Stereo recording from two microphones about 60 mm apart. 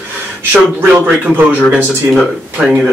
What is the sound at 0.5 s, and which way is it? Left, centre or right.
A man's voice, right.